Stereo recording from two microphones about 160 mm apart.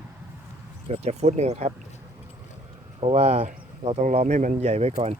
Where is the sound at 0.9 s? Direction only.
40° right (ahead or behind).